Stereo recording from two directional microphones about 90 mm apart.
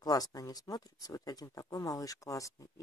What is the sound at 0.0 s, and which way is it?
Speech, 45° left (ahead or behind).